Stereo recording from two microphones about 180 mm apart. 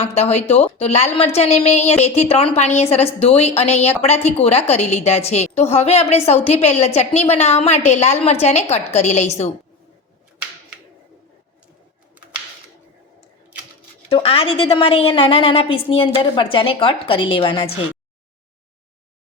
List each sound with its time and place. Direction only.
0.0 s a woman's voice: 35° left (ahead or behind)
14.1 s a woman's voice: 30° left (ahead or behind)